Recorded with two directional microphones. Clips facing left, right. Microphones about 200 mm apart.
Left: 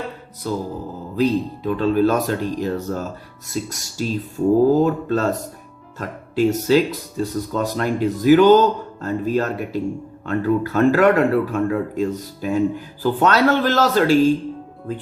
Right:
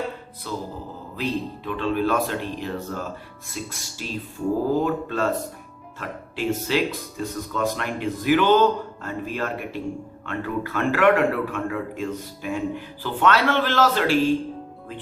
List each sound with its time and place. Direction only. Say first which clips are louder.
0.4 s music: left 7 dB; 40° left (ahead or behind)
1.1 s speech: left 8 dB; 40° left (ahead or behind)